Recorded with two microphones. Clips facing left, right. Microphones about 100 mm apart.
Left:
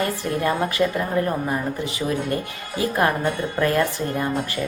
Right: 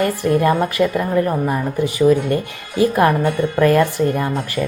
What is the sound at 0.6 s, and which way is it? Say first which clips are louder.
Speech: right 4 dB; 20° right (ahead or behind).